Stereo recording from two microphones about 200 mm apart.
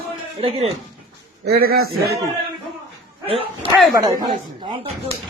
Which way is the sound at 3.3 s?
30° right (ahead or behind).